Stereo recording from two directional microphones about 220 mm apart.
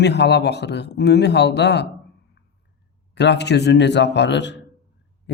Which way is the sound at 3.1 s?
50° left (ahead or behind).